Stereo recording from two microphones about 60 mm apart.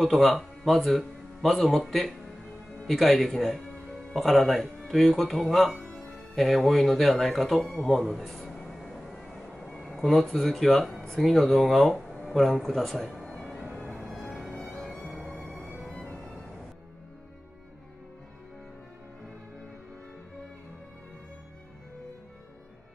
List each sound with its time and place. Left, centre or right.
0.0 s speech: centre
13.2 s music: centre
13.9 s music: centre